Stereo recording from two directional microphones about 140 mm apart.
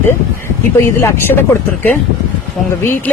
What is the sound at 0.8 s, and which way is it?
Speech, 15° left (ahead or behind).